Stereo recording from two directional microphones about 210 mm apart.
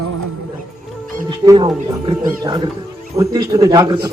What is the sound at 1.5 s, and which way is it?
Speech, 25° right (ahead or behind).